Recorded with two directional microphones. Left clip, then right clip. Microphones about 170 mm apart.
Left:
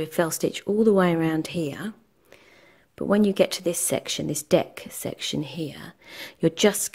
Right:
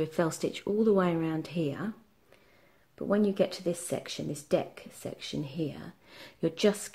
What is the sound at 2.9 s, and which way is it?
Speech, 45° left (ahead or behind).